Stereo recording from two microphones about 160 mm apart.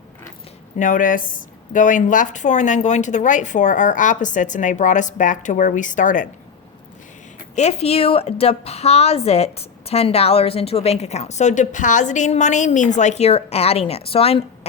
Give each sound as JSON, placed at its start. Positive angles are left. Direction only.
{"t": 0.8, "sound": "speech", "side_deg": 55}
{"t": 7.5, "sound": "a woman's voice", "side_deg": 40}